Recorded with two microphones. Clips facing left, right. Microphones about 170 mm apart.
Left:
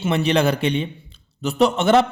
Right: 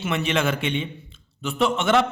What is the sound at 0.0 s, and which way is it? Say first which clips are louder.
A man's voice: left 5 dB; 35° left (ahead or behind).